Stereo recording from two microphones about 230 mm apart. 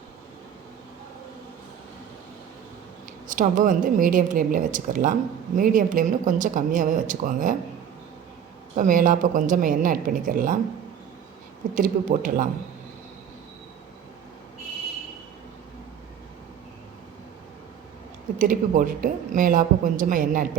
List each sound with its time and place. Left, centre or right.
3.2 s speech: right
8.7 s speech: right
11.7 s speech: right
18.3 s speech: right